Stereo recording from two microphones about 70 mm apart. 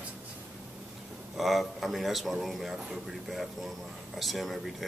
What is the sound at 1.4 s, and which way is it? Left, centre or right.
Speech, centre.